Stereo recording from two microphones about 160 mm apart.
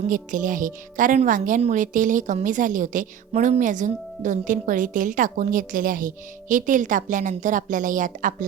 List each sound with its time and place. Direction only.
0.1 s a woman's voice: 55° right (ahead or behind)